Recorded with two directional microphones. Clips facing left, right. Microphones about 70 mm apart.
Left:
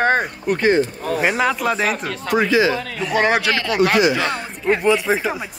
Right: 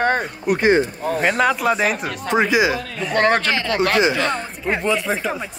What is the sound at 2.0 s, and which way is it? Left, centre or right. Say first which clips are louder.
Speech: even; right.